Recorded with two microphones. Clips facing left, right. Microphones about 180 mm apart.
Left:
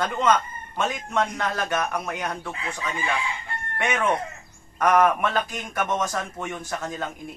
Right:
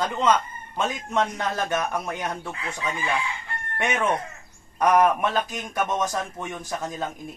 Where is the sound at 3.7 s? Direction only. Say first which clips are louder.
Even; 15° right (ahead or behind).